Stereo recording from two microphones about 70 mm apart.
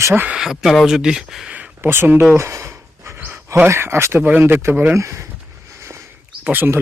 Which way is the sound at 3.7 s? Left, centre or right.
Right.